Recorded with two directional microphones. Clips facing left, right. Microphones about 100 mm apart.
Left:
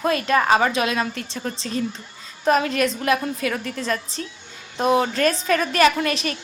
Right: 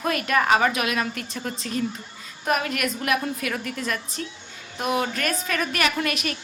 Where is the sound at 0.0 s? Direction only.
25° left (ahead or behind).